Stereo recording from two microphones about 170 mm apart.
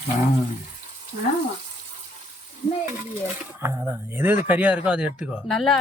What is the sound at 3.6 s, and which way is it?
A woman's voice, 15° right (ahead or behind).